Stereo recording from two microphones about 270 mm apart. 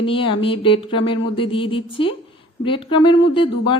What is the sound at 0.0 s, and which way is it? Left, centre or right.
Speech, centre.